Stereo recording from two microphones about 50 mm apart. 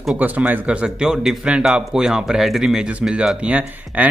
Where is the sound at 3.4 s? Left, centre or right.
Right.